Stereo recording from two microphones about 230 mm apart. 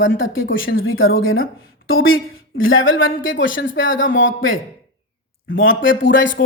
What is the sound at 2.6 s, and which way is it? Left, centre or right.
A man's voice, left.